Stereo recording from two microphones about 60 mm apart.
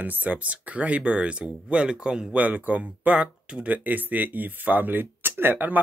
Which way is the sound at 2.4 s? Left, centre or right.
Right.